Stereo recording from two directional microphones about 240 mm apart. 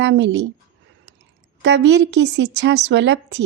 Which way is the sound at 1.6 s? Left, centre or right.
Right.